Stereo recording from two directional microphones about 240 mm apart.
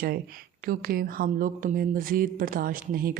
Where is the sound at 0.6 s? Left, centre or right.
Right.